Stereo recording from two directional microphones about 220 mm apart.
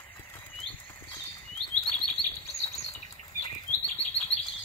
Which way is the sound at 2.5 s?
30° left (ahead or behind).